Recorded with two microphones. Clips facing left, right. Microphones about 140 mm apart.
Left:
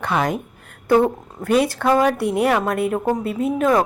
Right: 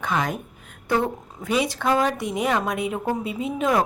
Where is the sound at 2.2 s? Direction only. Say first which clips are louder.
Left 7 dB; 60° left (ahead or behind).